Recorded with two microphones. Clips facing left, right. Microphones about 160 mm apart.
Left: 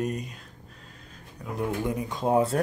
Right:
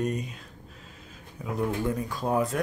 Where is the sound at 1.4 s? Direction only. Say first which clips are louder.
Right 2 dB; centre (ahead or behind).